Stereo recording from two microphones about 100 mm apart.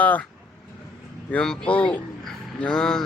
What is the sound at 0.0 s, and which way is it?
Speech, 15° left (ahead or behind).